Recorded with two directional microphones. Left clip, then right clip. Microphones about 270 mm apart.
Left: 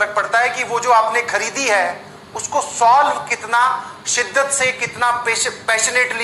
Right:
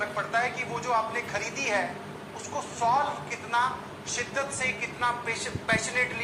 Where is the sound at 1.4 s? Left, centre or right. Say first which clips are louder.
Left 11 dB; left.